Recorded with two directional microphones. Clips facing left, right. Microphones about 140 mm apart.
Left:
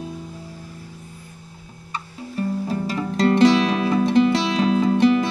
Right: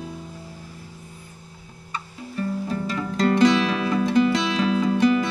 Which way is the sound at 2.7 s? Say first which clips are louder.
Left 2 dB; 25° left (ahead or behind).